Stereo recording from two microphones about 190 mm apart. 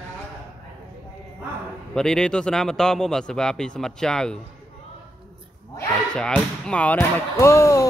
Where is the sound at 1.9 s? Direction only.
5° left (ahead or behind).